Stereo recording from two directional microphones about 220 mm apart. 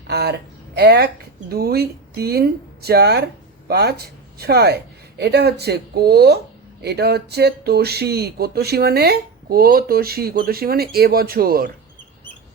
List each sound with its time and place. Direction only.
0.1 s speech: 50° right (ahead or behind)